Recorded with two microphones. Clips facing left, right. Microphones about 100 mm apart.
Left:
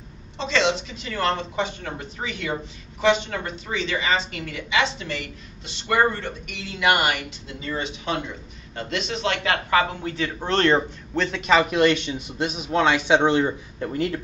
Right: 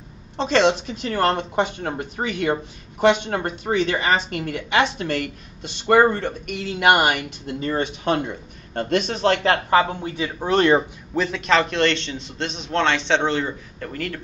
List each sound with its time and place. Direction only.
0.4 s speech: 50° right (ahead or behind); by 10.1 s 30° right (ahead or behind)
10.1 s speech: 10° right (ahead or behind); by 14.2 s 20° left (ahead or behind)